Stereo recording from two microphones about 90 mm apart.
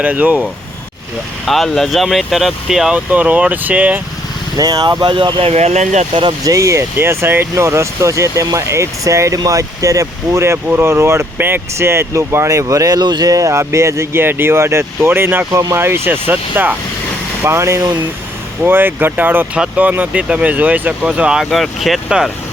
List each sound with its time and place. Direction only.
0.0 s speech: 15° right (ahead or behind)
1.5 s speech: centre (ahead or behind)
2.9 s speech: 15° right (ahead or behind)
4.5 s speech: 45° right (ahead or behind)
5.1 s speech: 75° right (ahead or behind)
6.4 s speech: 35° right (ahead or behind); by 22.3 s 5° right (ahead or behind)